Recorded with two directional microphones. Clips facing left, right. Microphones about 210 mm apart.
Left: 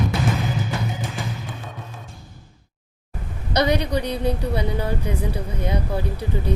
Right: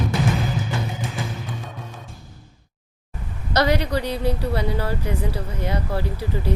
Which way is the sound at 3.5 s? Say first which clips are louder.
Even; 15° left (ahead or behind).